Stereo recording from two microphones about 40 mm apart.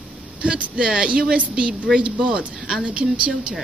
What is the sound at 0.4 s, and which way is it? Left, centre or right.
A woman's voice, right.